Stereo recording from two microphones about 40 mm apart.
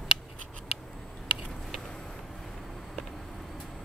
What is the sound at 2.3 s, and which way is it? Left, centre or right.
Vehicle, centre.